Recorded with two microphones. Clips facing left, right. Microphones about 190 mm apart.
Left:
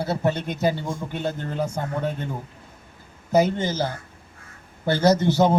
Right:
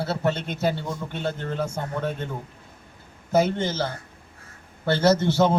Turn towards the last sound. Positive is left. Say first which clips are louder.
# left 1 dB
turn(degrees=15)  # may be behind; listen again after turning